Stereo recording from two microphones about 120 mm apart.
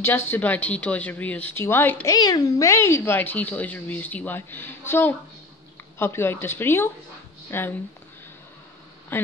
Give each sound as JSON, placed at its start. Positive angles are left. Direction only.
{"t": 0.0, "sound": "speech", "side_deg": 15}
{"t": 2.0, "sound": "speech", "side_deg": 35}
{"t": 9.1, "sound": "speech", "side_deg": 20}